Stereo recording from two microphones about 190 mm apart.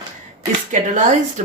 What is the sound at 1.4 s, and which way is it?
Speech, 40° right (ahead or behind).